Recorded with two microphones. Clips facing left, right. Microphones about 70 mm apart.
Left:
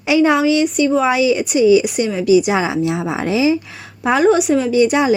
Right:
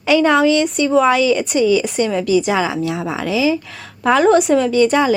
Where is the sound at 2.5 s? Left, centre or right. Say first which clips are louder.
Left 1 dB; left.